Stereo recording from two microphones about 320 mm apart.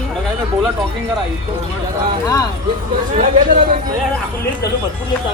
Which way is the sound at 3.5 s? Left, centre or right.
Right.